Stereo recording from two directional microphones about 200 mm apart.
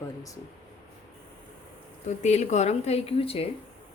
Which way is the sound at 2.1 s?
35° left (ahead or behind).